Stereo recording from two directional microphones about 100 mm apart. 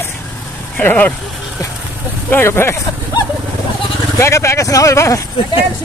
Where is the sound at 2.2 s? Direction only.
20° left (ahead or behind).